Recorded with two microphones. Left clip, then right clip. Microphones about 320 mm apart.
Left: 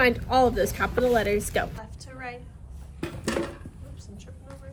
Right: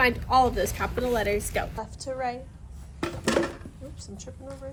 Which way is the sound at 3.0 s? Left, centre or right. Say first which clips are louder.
Right 4 dB; centre.